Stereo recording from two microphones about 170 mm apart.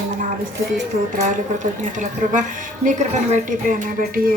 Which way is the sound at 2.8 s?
45° right (ahead or behind).